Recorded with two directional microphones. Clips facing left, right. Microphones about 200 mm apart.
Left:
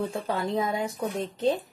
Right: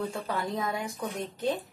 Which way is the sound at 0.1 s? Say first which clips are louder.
Left 4 dB; 20° left (ahead or behind).